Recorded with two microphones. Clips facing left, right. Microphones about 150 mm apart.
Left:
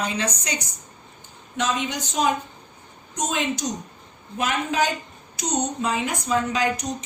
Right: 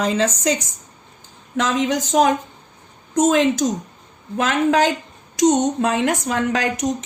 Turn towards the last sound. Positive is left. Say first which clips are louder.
# right 2 dB
turn(degrees=-90)